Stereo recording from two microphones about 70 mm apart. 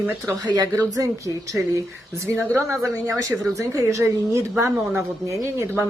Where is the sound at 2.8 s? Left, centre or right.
Right.